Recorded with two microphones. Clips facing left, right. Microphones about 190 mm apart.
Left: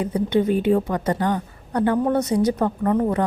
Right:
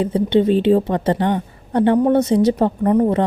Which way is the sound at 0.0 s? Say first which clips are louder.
Right 4 dB; 25° right (ahead or behind).